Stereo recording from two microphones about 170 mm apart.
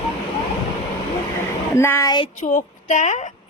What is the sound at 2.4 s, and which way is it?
Speech, 45° left (ahead or behind).